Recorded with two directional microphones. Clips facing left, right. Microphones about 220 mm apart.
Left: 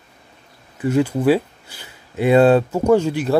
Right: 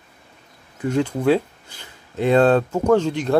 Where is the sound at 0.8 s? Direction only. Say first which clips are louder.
Left 3 dB; 5° left (ahead or behind).